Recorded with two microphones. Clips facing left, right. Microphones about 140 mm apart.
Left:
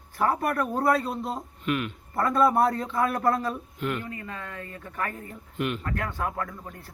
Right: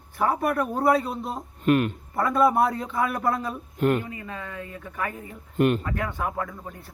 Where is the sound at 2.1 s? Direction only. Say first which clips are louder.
Right 1 dB; centre (ahead or behind).